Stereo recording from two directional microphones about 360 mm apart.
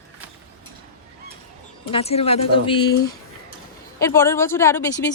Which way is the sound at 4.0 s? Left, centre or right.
Centre.